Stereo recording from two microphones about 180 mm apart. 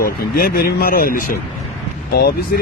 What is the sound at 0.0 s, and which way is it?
Speech, 55° left (ahead or behind).